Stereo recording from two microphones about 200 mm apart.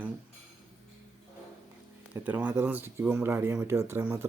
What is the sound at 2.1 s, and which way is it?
Speech, 5° right (ahead or behind).